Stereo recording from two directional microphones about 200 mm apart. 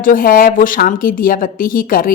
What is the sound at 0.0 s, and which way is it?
A woman's voice, 45° left (ahead or behind).